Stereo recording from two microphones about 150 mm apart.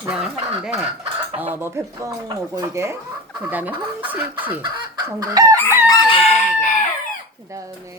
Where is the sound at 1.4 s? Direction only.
15° right (ahead or behind).